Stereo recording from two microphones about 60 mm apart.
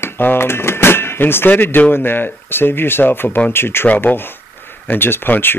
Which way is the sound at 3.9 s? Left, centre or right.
Left.